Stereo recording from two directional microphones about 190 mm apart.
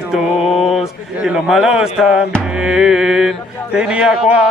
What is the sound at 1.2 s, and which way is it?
Mantra, 5° right (ahead or behind).